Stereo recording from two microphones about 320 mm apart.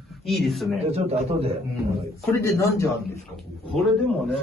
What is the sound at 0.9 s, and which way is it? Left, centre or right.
Speech, centre.